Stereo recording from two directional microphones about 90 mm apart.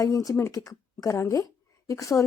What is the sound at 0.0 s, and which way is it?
A woman's voice, 40° left (ahead or behind).